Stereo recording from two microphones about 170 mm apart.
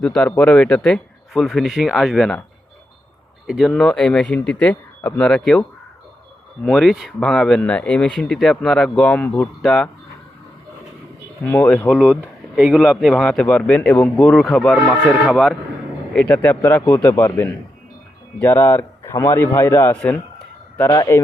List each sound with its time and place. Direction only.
0.0 s a man's voice: 5° left (ahead or behind)
3.4 s a man's voice: centre (ahead or behind)
6.7 s a man's voice: centre (ahead or behind)
11.4 s speech: 10° left (ahead or behind)
12.2 s a man's voice: 5° right (ahead or behind)
16.1 s speech: 10° left (ahead or behind)